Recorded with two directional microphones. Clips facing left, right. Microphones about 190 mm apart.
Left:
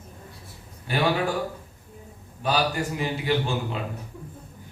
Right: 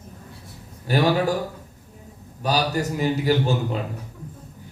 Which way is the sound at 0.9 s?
40° right (ahead or behind).